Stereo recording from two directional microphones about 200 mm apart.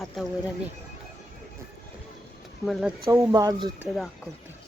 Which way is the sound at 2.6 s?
Centre (ahead or behind).